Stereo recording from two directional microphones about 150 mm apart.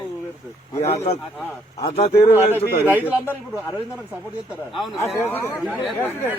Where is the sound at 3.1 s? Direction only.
15° left (ahead or behind).